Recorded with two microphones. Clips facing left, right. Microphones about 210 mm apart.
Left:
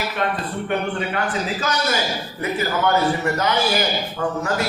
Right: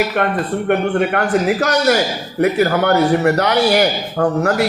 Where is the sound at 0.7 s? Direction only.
60° right (ahead or behind).